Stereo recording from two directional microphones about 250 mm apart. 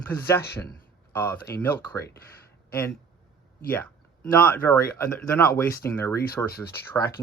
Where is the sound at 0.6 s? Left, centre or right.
Centre.